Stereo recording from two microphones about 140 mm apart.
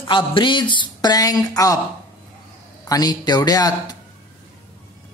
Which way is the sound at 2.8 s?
25° left (ahead or behind).